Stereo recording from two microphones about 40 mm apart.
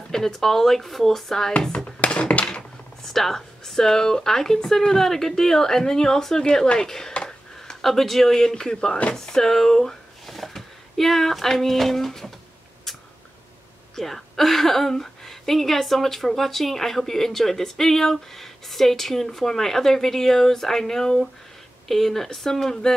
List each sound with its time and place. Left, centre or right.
0.1 s speech: centre
1.9 s a sound: left
3.0 s a woman's voice: centre
13.9 s a woman's voice: centre